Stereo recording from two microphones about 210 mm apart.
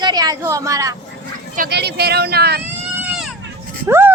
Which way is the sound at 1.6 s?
50° right (ahead or behind).